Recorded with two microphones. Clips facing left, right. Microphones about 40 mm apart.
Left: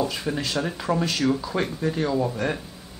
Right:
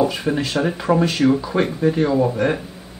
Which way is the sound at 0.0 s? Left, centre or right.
Centre.